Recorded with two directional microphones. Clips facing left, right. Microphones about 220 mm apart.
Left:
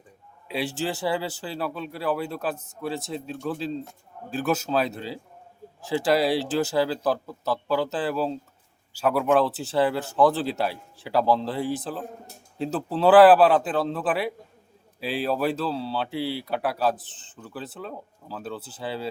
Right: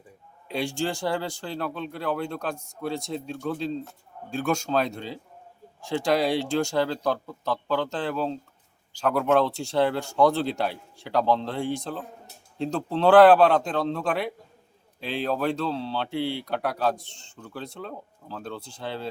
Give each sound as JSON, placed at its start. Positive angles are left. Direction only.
{"t": 0.4, "sound": "speech", "side_deg": 5}